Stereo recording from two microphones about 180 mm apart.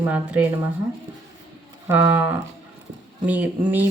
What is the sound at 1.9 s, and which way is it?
Speech, 10° right (ahead or behind).